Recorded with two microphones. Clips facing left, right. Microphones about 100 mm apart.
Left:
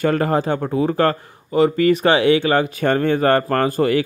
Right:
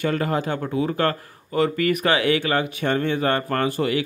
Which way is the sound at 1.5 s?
25° left (ahead or behind).